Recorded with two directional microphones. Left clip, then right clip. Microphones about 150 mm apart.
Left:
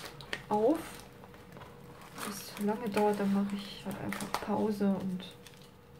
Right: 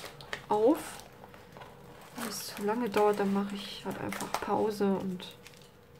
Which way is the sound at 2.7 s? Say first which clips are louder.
Right 3 dB; 40° right (ahead or behind).